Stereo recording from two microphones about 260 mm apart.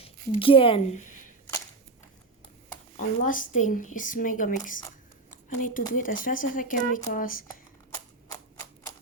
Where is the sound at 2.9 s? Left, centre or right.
Left.